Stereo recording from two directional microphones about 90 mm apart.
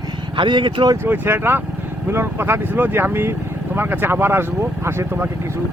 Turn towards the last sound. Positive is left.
turn(degrees=-30)  # may be behind; listen again after turning